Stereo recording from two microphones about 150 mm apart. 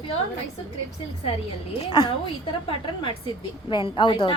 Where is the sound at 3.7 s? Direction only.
35° left (ahead or behind).